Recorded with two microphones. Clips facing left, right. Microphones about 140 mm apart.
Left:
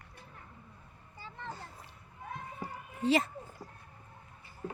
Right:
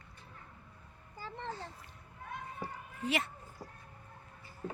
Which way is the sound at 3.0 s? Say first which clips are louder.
Left 7 dB; 35° left (ahead or behind).